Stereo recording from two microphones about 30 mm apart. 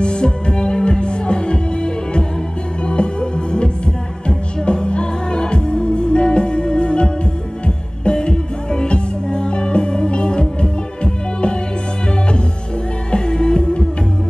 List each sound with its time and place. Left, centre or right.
0.0 s music: left
13.1 s music: left